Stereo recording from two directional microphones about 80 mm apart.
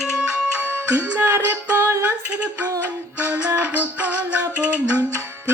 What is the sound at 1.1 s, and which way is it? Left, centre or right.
Music, right.